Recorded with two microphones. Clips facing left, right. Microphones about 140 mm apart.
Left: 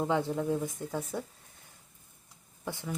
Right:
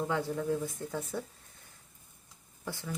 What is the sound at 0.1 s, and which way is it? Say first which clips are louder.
A woman's voice: left 2 dB; 20° left (ahead or behind).